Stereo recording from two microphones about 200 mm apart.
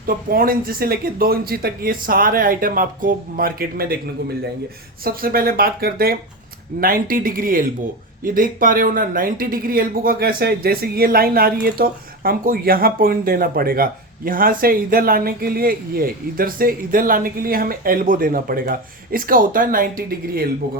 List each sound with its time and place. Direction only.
0.1 s speech: 45° right (ahead or behind)
5.0 s speech: 45° right (ahead or behind)